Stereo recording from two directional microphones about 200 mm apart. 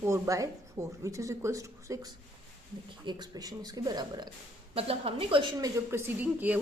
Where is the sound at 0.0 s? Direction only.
15° right (ahead or behind).